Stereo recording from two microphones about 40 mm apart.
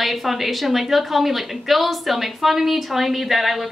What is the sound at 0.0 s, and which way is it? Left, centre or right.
A woman's voice, centre.